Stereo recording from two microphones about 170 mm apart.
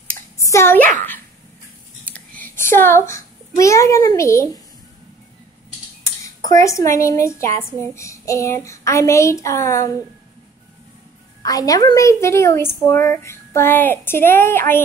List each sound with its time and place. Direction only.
0.4 s a child's voice: 15° left (ahead or behind)
2.4 s a child's voice: 15° left (ahead or behind)
6.2 s speech: 20° left (ahead or behind)
11.4 s speech: 20° left (ahead or behind)